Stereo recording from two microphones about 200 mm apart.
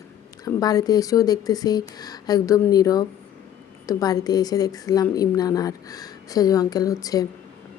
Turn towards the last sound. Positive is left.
turn(degrees=15)  # may be behind; listen again after turning